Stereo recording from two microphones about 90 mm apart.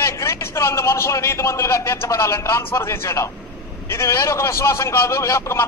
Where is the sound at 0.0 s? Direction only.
30° left (ahead or behind).